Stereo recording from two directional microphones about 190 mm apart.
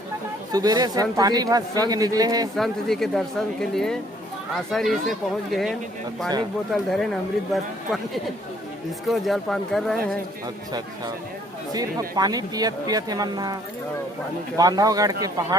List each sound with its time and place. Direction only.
0.5 s speech: 20° right (ahead or behind)
2.6 s speech: centre (ahead or behind)
9.0 s speech: centre (ahead or behind)
10.4 s speech: 20° right (ahead or behind)